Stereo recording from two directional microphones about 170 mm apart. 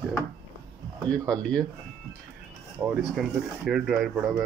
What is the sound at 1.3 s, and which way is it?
Speech, 5° left (ahead or behind).